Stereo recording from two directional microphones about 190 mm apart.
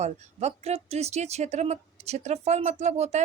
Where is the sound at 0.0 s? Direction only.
35° right (ahead or behind).